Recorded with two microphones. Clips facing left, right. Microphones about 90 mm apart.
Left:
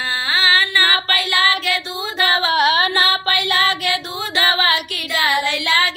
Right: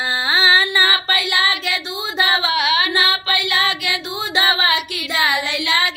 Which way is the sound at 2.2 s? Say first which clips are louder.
Left 4 dB; 40° left (ahead or behind).